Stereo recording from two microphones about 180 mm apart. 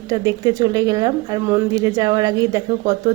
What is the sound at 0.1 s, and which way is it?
Speech, 20° right (ahead or behind).